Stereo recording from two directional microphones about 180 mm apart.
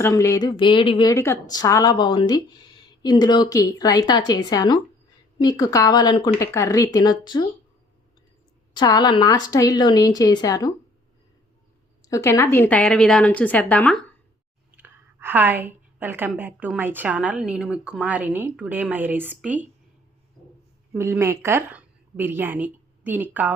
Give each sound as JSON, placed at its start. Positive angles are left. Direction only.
{"t": 0.0, "sound": "a woman's voice", "side_deg": 15}
{"t": 8.7, "sound": "a woman's voice", "side_deg": 25}
{"t": 12.0, "sound": "a woman's voice", "side_deg": 15}
{"t": 14.8, "sound": "a sound", "side_deg": -10}
{"t": 16.4, "sound": "speech", "side_deg": -10}
{"t": 20.9, "sound": "a woman's voice", "side_deg": -15}